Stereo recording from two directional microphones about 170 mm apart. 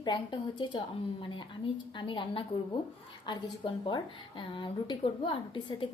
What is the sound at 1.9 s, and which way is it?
A woman's voice, 30° left (ahead or behind).